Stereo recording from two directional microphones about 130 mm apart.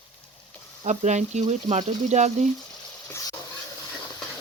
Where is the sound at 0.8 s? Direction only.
65° right (ahead or behind).